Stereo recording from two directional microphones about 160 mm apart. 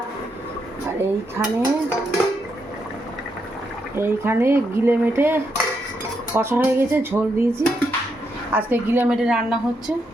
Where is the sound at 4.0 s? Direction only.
15° right (ahead or behind).